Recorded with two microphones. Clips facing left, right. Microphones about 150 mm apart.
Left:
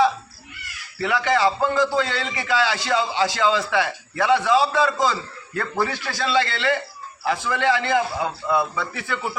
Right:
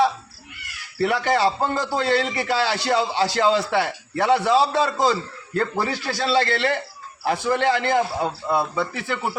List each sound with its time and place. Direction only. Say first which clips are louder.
0.9 s a man's voice: right 1 dB; 40° right (ahead or behind)